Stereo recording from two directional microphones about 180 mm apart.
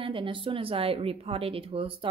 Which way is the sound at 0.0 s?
30° right (ahead or behind).